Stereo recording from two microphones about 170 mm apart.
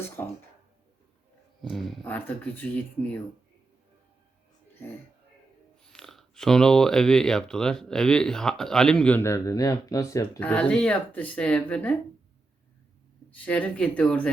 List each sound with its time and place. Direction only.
0.2 s a sound: 10° left (ahead or behind)
1.6 s speech: centre (ahead or behind)
5.8 s speech: 5° left (ahead or behind); by 10.4 s 20° left (ahead or behind)
10.4 s speech: 5° left (ahead or behind)
13.3 s speech: 10° left (ahead or behind)